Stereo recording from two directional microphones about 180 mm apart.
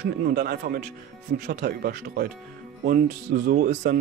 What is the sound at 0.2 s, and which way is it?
Speech, 55° right (ahead or behind).